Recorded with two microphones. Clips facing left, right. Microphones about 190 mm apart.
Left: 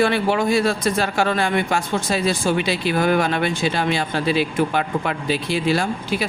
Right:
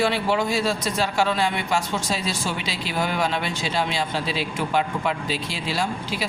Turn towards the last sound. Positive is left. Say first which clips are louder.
# left 5 dB
turn(degrees=55)  # may be behind; listen again after turning